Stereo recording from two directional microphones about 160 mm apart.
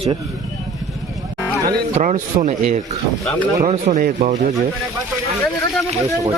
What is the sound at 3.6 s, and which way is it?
Speech, 45° right (ahead or behind).